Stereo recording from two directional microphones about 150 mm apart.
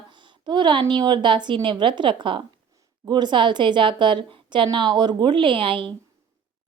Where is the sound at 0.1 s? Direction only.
30° right (ahead or behind).